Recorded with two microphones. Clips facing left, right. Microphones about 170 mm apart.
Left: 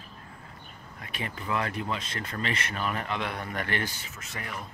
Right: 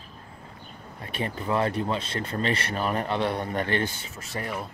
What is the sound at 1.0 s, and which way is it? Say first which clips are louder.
Speech: right 6 dB; 35° right (ahead or behind).